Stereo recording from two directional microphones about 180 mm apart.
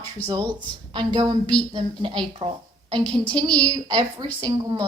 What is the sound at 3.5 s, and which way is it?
Speech, 20° right (ahead or behind).